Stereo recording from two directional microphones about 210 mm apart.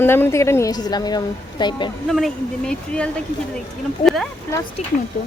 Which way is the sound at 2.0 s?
Centre (ahead or behind).